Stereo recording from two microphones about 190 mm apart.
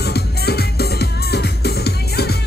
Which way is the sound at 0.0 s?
60° left (ahead or behind).